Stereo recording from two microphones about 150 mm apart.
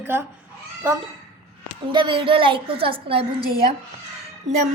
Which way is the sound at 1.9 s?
35° right (ahead or behind).